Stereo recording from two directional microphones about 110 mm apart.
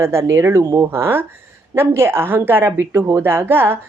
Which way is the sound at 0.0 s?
25° right (ahead or behind).